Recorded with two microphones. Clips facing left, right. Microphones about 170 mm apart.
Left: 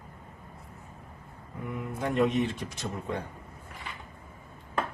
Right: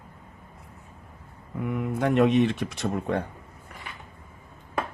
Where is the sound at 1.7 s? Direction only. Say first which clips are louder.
Right 7 dB; 70° right (ahead or behind).